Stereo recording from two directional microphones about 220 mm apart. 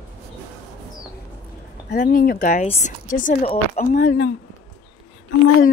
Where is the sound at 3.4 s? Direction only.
25° left (ahead or behind).